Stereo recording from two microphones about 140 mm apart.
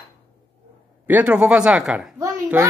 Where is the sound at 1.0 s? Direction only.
10° right (ahead or behind).